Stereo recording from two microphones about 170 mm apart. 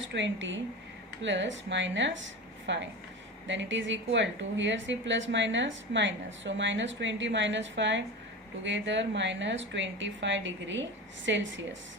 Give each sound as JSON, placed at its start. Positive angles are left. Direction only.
{"t": 0.0, "sound": "a woman's voice", "side_deg": -90}